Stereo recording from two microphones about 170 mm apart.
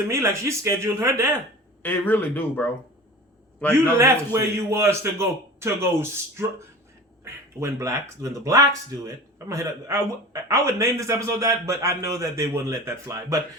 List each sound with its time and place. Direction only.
0.1 s speech: 15° right (ahead or behind)
1.8 s speech: 10° left (ahead or behind)
3.9 s speech: 15° right (ahead or behind)
7.6 s speech: 15° right (ahead or behind)